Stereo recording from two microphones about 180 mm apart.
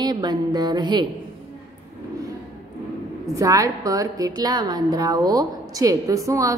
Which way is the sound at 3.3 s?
20° right (ahead or behind).